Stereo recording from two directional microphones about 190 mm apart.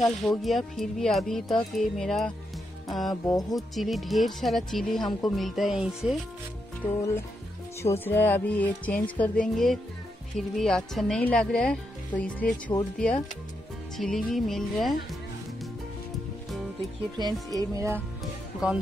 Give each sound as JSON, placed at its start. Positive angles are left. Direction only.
{"t": 0.0, "sound": "speech", "side_deg": 0}
{"t": 3.3, "sound": "music", "side_deg": 20}
{"t": 3.5, "sound": "speech", "side_deg": 0}
{"t": 6.8, "sound": "speech", "side_deg": 30}
{"t": 7.8, "sound": "speech", "side_deg": 10}
{"t": 10.5, "sound": "speech", "side_deg": 0}
{"t": 17.6, "sound": "speech", "side_deg": -15}
{"t": 18.6, "sound": "speech", "side_deg": -5}